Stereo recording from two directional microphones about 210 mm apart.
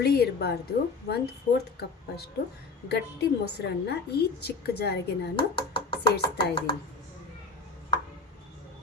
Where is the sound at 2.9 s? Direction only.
50° left (ahead or behind).